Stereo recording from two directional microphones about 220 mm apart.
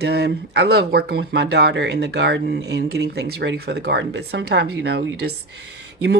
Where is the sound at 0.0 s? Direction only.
50° right (ahead or behind).